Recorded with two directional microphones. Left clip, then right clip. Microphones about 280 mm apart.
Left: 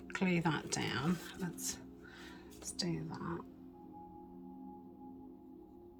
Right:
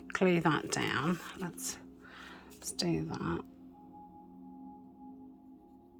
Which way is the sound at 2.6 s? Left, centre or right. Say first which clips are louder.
Right 7 dB; right.